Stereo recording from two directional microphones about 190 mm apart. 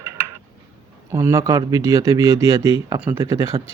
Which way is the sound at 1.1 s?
15° right (ahead or behind).